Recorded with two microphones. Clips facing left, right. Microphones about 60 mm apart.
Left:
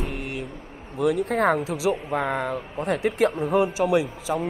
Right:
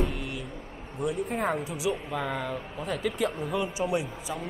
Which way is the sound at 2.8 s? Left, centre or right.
Left.